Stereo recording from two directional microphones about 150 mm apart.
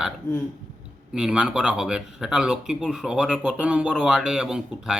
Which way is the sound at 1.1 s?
5° right (ahead or behind).